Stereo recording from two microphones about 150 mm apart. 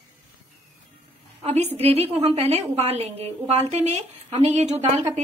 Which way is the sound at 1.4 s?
45° right (ahead or behind).